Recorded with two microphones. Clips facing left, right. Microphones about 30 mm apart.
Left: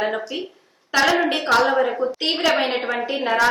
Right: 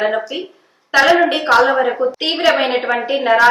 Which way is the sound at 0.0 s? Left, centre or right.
Centre.